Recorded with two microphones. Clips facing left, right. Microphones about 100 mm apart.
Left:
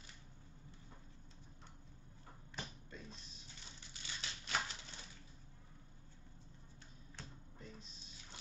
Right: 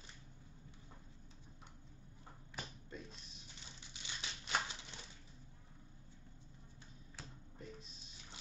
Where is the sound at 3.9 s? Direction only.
20° right (ahead or behind).